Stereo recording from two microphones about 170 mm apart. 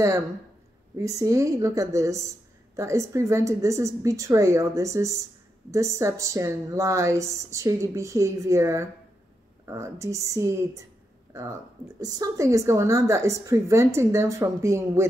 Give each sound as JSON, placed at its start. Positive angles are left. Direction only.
{"t": 0.9, "sound": "a woman's voice", "side_deg": -20}